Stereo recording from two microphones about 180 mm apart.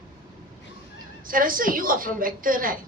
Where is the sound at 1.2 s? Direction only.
50° right (ahead or behind).